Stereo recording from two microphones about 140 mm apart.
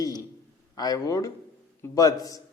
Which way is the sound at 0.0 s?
25° left (ahead or behind).